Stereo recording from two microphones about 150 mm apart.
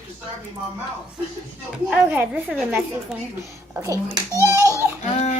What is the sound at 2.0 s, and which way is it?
Speech, 15° right (ahead or behind).